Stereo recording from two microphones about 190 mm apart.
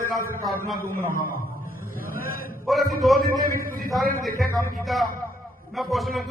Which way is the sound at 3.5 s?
50° right (ahead or behind).